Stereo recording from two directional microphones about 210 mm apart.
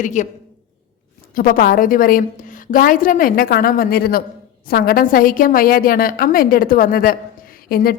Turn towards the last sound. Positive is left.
turn(degrees=45)  # may be behind; listen again after turning